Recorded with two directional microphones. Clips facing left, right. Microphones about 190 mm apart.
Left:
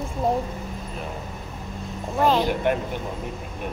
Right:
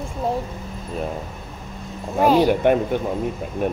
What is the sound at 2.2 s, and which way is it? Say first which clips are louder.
Speech: right 5 dB; 10° right (ahead or behind).